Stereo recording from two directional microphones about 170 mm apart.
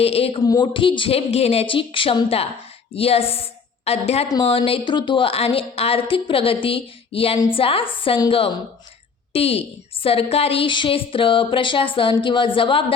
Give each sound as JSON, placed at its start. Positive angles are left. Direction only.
{"t": 0.0, "sound": "speech", "side_deg": 35}
{"t": 0.4, "sound": "a woman's voice", "side_deg": 25}